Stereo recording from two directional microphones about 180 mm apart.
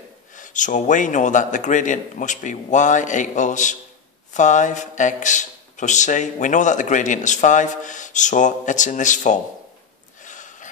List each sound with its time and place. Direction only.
0.4 s speech: 45° left (ahead or behind)
10.2 s snort: 45° left (ahead or behind)